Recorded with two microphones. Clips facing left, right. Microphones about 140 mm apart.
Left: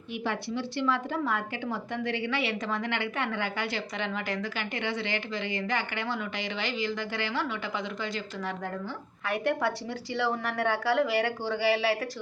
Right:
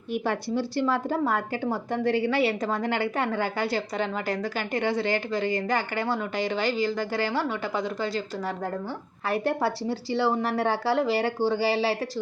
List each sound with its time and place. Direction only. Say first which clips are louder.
0.1 s a woman's voice: right 5 dB; 40° right (ahead or behind)